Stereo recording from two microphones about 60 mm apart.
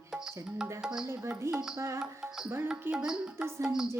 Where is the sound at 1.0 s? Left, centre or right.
Right.